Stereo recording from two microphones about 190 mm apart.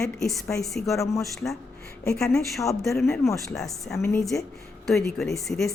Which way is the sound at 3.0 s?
15° left (ahead or behind).